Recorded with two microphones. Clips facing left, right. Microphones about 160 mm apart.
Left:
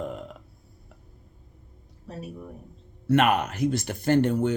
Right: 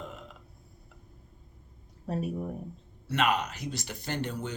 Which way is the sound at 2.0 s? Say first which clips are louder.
Right 6 dB; 45° right (ahead or behind).